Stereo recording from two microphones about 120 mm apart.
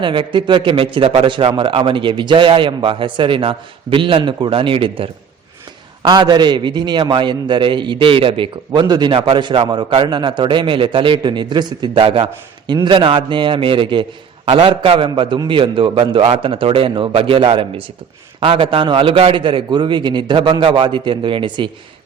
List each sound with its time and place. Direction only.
0.0 s a man's voice: 40° right (ahead or behind)
12.0 s a man's voice: 55° right (ahead or behind)
12.6 s a man's voice: 40° right (ahead or behind)